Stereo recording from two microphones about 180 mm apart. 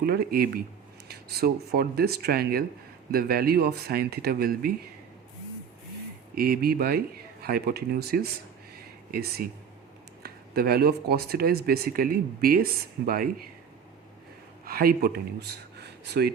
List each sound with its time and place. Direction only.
0.0 s speech: 60° right (ahead or behind)
6.3 s speech: 55° right (ahead or behind)
14.6 s speech: 55° right (ahead or behind)